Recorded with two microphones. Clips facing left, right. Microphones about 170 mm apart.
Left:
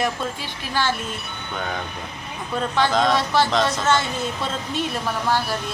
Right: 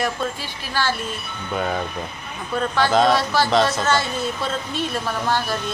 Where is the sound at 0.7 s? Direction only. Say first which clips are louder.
Even; 20° left (ahead or behind).